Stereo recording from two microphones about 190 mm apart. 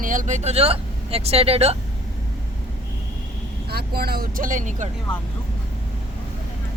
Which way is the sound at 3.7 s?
55° right (ahead or behind).